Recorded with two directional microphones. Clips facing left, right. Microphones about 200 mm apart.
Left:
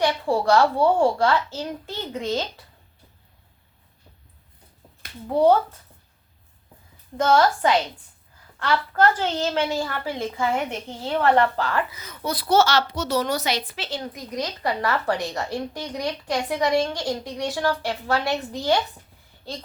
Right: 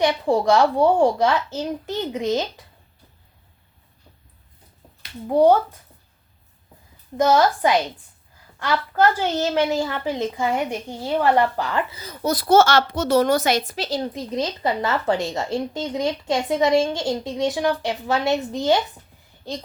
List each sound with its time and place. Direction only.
0.0 s a woman's voice: 20° right (ahead or behind)
5.3 s a woman's voice: 10° right (ahead or behind)
7.2 s a woman's voice: 10° right (ahead or behind)